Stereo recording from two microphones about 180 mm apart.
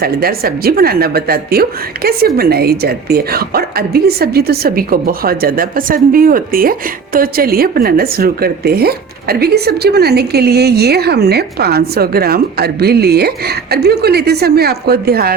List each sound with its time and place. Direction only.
0.0 s a woman's voice: 60° right (ahead or behind)